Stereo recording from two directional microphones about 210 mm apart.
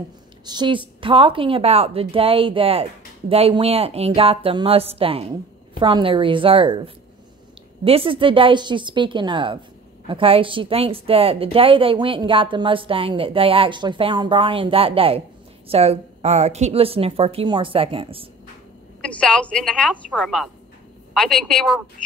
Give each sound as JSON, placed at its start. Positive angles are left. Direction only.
{"t": 0.5, "sound": "a woman's voice", "side_deg": -20}
{"t": 18.9, "sound": "a woman's voice", "side_deg": 5}